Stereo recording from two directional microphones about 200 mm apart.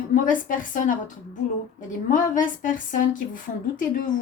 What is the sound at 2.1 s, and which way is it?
A woman's voice, 40° left (ahead or behind).